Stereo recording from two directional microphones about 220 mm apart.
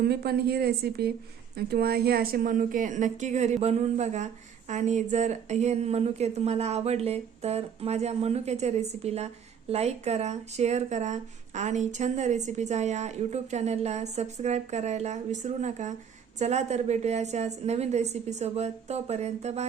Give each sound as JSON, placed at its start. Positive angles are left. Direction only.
{"t": 0.0, "sound": "a woman's voice", "side_deg": -45}